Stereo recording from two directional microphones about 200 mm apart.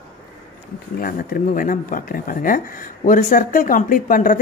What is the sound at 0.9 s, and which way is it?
A woman's voice, 45° left (ahead or behind).